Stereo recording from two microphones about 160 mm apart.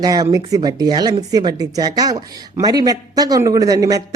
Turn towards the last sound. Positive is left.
turn(degrees=-20)  # may be behind; listen again after turning